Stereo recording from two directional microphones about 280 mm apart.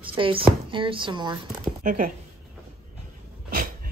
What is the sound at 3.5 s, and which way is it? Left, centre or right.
Dog, right.